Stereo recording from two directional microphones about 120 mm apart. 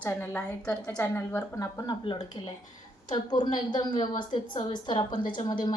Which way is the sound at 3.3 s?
35° left (ahead or behind).